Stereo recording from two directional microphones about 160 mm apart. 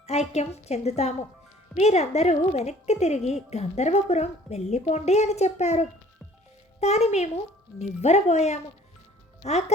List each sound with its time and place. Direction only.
0.0 s a woman's voice: 45° left (ahead or behind)